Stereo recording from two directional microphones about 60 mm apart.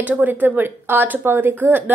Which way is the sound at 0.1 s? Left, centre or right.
Right.